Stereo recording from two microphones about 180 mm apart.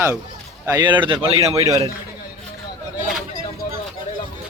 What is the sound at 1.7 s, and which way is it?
Speech, 20° right (ahead or behind).